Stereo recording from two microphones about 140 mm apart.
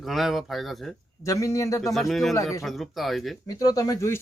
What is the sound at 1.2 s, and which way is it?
Speech, 20° left (ahead or behind).